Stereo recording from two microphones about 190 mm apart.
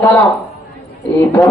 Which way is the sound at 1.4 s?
15° left (ahead or behind).